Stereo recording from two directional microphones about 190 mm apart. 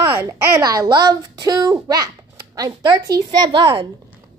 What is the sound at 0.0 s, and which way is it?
A woman's voice, 15° right (ahead or behind).